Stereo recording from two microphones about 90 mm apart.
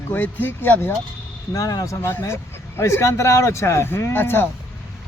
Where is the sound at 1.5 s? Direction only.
40° left (ahead or behind).